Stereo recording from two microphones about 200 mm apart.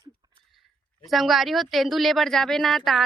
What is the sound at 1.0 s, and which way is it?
A woman's voice, centre (ahead or behind).